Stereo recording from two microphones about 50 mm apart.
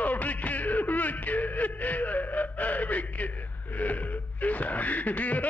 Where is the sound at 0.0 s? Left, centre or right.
Left.